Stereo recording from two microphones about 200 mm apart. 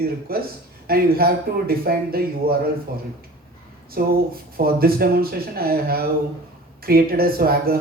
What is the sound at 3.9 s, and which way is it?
Speech, 50° right (ahead or behind).